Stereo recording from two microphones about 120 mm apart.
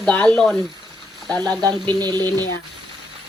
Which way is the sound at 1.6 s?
35° right (ahead or behind).